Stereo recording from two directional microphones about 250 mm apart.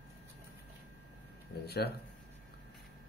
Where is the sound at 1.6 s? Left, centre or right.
Left.